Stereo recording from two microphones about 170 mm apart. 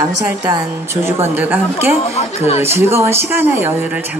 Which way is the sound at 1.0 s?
15° right (ahead or behind).